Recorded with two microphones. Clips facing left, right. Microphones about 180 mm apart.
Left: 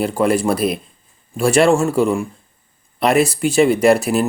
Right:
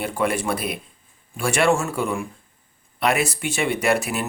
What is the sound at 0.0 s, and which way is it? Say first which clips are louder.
Speech: left 7 dB; 35° left (ahead or behind).